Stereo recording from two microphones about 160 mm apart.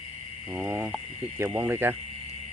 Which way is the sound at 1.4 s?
15° right (ahead or behind).